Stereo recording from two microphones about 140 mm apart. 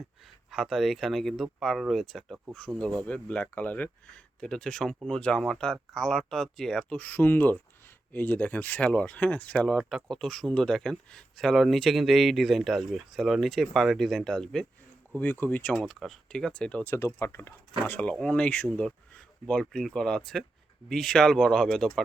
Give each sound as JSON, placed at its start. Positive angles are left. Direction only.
{"t": 0.5, "sound": "speech", "side_deg": 0}